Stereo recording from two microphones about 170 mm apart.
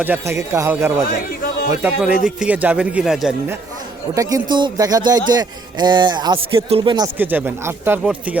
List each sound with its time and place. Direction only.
0.0 s speech: 15° right (ahead or behind)
4.1 s speech: 20° right (ahead or behind)
7.2 s speech: 10° right (ahead or behind)